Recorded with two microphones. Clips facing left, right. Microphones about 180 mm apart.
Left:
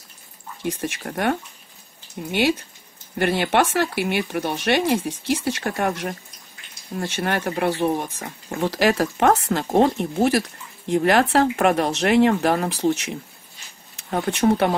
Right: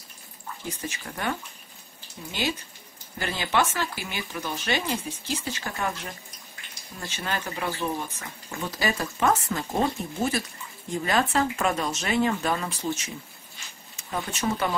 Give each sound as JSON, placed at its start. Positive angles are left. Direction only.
{"t": 0.6, "sound": "speech", "side_deg": 75}
{"t": 7.0, "sound": "speech", "side_deg": 70}
{"t": 8.5, "sound": "speech", "side_deg": 90}
{"t": 14.1, "sound": "speech", "side_deg": 60}